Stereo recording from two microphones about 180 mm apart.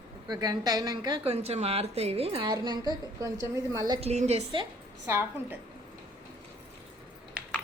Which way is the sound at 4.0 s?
35° right (ahead or behind).